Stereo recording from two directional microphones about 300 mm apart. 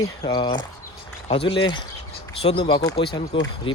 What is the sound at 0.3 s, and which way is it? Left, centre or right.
Speech, centre.